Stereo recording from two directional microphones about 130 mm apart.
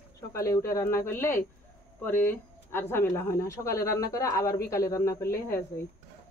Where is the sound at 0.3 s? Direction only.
25° left (ahead or behind).